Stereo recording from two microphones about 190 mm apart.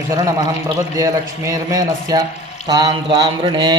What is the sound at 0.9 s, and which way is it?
A man's voice, 15° right (ahead or behind).